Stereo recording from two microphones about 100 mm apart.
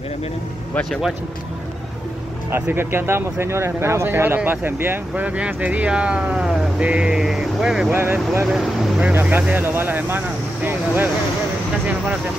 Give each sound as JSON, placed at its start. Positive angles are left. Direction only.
{"t": 2.5, "sound": "speech", "side_deg": -25}
{"t": 7.9, "sound": "speech", "side_deg": -20}
{"t": 8.5, "sound": "speech", "side_deg": 0}
{"t": 9.0, "sound": "speech", "side_deg": -15}